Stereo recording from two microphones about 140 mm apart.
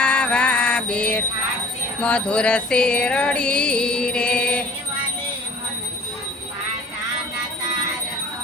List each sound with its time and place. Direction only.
0.0 s mantra: 10° left (ahead or behind)
2.0 s music: 10° left (ahead or behind)